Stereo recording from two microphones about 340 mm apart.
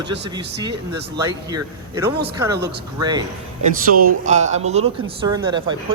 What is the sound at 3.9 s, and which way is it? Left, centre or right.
Speech, right.